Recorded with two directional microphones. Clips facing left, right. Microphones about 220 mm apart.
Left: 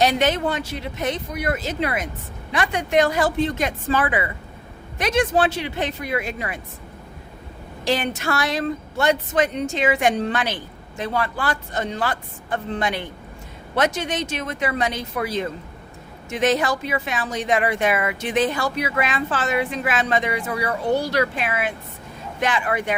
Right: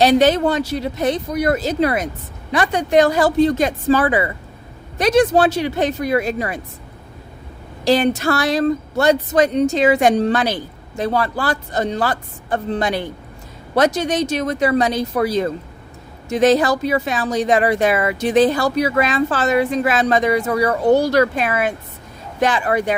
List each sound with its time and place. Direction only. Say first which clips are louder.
0.0 s speech: right 6 dB; 35° right (ahead or behind)
7.9 s speech: right 7 dB; 35° right (ahead or behind)